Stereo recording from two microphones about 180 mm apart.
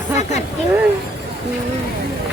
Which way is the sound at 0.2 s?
40° left (ahead or behind).